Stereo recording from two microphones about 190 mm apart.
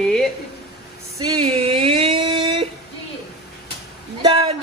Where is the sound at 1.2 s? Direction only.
25° right (ahead or behind).